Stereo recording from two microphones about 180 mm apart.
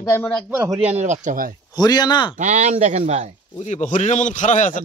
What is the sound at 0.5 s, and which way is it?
Speech, 15° right (ahead or behind).